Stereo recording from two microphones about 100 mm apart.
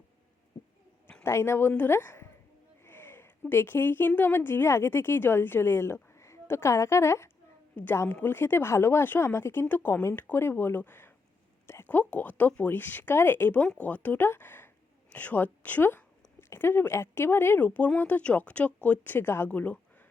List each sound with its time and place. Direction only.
1.2 s a woman's voice: 25° left (ahead or behind)
2.8 s a sound: 20° left (ahead or behind)
3.5 s a woman's voice: 20° left (ahead or behind)